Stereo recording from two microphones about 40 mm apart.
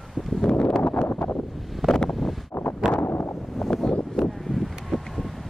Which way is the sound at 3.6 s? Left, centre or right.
Centre.